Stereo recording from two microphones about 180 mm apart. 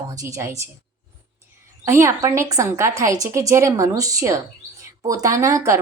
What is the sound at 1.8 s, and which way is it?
A woman's voice, 15° right (ahead or behind).